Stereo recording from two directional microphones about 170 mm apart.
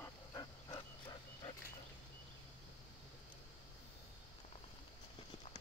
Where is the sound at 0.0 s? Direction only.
20° left (ahead or behind).